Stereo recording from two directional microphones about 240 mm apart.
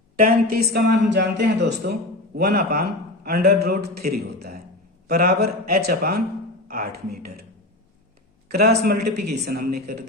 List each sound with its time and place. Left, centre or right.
0.2 s a man's voice: right
8.4 s speech: right